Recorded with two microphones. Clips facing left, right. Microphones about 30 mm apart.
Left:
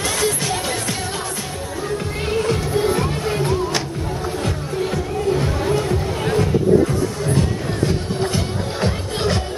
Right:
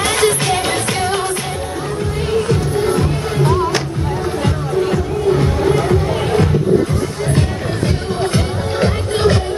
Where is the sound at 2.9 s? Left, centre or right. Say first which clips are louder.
Right 3 dB; centre.